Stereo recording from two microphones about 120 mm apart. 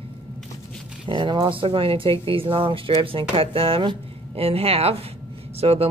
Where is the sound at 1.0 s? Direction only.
40° right (ahead or behind).